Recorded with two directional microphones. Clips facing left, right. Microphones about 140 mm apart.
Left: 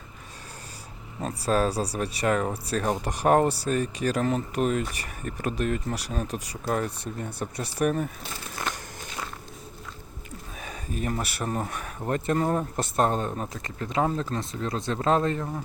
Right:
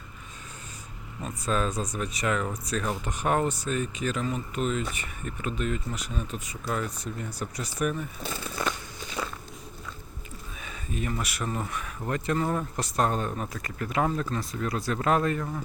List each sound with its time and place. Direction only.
1.2 s speech: 35° left (ahead or behind)
4.3 s speech: 50° left (ahead or behind)
5.9 s speech: 40° left (ahead or behind)
7.2 s speech: 25° left (ahead or behind)
10.6 s a sound: 45° left (ahead or behind)
11.2 s speech: 30° left (ahead or behind)
11.4 s speech: 45° left (ahead or behind); by 15.6 s 25° left (ahead or behind)